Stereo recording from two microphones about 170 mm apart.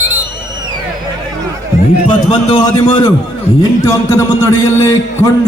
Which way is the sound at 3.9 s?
20° left (ahead or behind).